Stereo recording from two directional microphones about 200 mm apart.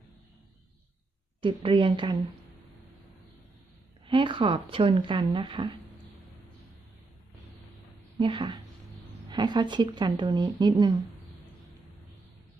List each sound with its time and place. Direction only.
1.4 s speech: 25° right (ahead or behind)
4.0 s speech: 25° right (ahead or behind)
8.2 s speech: 25° right (ahead or behind)